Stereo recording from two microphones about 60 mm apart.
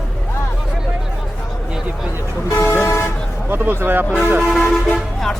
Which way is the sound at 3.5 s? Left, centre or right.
Right.